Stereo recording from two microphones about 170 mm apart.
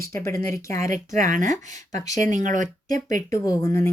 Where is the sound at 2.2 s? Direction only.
50° right (ahead or behind).